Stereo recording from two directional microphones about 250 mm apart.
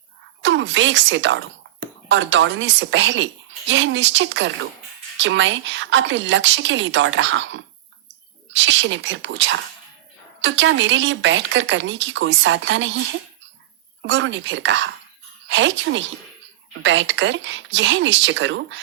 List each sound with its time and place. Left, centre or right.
0.4 s a woman's voice: right
14.0 s a woman's voice: right